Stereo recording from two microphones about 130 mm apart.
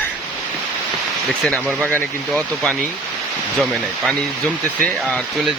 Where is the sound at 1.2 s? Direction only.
Centre (ahead or behind).